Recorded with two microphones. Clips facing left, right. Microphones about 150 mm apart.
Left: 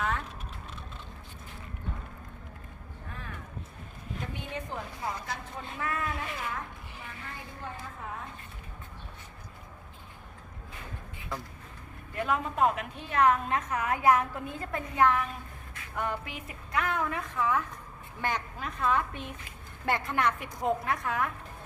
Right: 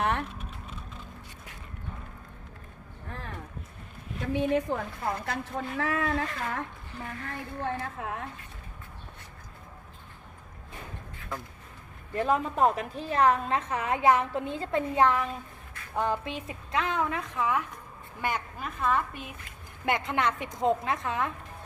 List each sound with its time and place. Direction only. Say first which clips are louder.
0.0 s vehicle: right 4 dB; 70° right (ahead or behind)
4.5 s a woman's voice: right 9 dB; 60° right (ahead or behind); by 6.6 s 85° right
7.3 s a woman's voice: right 9 dB; 75° right (ahead or behind)
12.1 s a woman's voice: right 4 dB; 35° right (ahead or behind); by 19.4 s 5° right (ahead or behind)
19.8 s a woman's voice: right 1 dB; 20° right (ahead or behind)